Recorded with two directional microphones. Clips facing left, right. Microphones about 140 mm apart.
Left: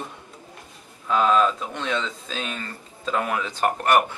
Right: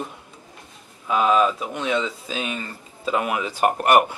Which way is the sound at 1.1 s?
10° right (ahead or behind).